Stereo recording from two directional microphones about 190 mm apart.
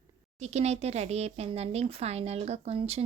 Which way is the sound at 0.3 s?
35° right (ahead or behind).